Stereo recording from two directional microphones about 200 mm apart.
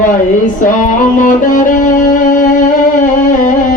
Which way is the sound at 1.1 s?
40° left (ahead or behind).